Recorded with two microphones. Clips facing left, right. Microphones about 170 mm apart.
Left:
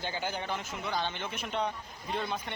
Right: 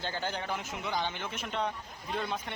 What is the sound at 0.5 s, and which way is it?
Speech, 15° right (ahead or behind).